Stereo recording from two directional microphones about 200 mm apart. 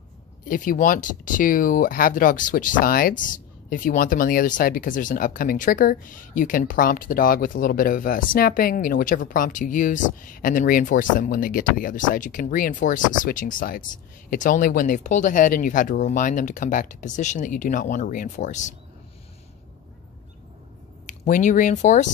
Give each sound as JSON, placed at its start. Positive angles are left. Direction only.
{"t": 0.5, "sound": "speech", "side_deg": 45}
{"t": 21.1, "sound": "speech", "side_deg": 40}